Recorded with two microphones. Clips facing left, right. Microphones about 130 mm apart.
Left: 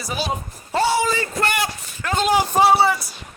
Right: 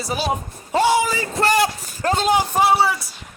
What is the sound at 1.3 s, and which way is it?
Speech, 35° right (ahead or behind).